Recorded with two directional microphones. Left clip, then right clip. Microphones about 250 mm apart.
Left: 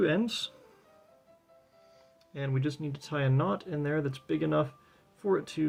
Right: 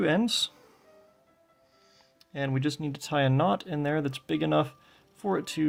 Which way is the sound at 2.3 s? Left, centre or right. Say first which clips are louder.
Right 4 dB; right.